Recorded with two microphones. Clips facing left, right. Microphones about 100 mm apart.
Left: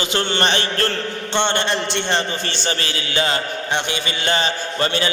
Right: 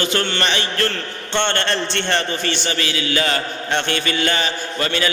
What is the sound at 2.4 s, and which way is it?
A man's voice, 30° left (ahead or behind).